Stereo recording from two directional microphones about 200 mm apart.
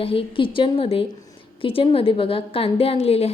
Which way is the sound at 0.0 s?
25° left (ahead or behind).